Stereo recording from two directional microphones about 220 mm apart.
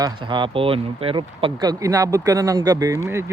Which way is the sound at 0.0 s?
20° right (ahead or behind).